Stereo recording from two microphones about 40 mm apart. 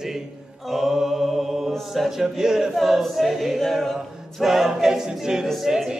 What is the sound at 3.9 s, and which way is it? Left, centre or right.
Music, centre.